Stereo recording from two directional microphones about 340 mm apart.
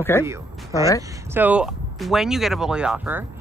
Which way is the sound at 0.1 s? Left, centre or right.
Centre.